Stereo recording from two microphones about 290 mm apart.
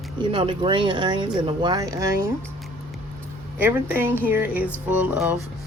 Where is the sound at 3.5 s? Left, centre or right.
Centre.